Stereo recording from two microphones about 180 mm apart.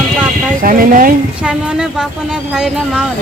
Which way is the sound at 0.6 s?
50° right (ahead or behind).